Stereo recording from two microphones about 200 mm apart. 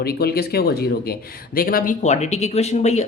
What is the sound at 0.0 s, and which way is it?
Speech, 50° left (ahead or behind).